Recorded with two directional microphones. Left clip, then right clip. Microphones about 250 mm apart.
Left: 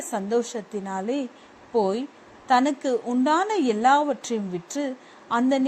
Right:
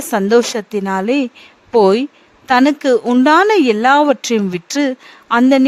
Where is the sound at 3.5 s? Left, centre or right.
Right.